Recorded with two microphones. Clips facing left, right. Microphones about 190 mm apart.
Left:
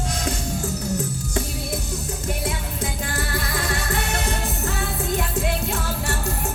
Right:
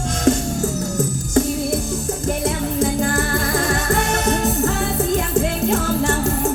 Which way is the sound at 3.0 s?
45° right (ahead or behind).